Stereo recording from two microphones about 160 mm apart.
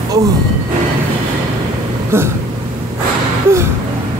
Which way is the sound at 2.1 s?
15° right (ahead or behind).